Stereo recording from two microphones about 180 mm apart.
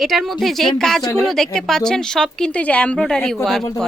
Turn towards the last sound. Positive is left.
turn(degrees=0)  # may be behind; listen again after turning